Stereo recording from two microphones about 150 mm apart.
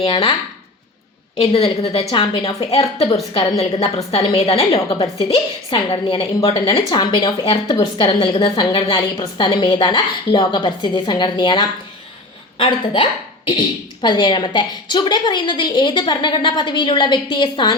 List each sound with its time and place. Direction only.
0.0 s a woman's voice: 35° left (ahead or behind)
1.4 s a woman's voice: 45° left (ahead or behind)